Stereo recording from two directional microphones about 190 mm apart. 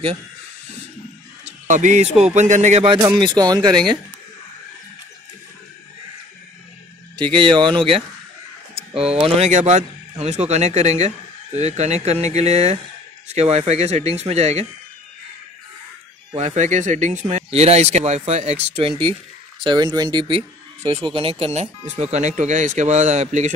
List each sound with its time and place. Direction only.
1.4 s music: 40° right (ahead or behind)
2.3 s speech: 40° right (ahead or behind); by 4.0 s 25° right (ahead or behind)
7.3 s speech: 25° right (ahead or behind)
16.3 s speech: 40° right (ahead or behind)